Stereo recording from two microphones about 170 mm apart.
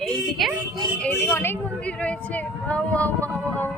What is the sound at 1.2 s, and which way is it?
Speech, 15° left (ahead or behind).